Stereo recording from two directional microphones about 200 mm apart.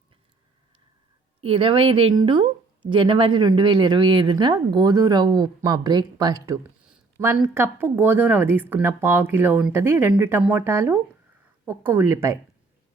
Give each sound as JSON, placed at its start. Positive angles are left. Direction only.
{"t": 1.4, "sound": "speech", "side_deg": -25}